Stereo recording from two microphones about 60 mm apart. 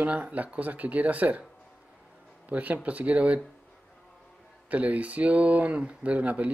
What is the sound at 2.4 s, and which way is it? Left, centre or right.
Speech, right.